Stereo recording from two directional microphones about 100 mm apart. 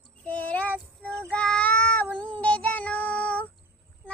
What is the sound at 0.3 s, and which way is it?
Child singing, 15° left (ahead or behind).